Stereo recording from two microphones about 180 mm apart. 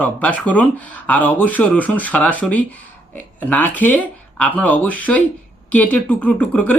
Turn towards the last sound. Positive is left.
turn(degrees=10)  # may be behind; listen again after turning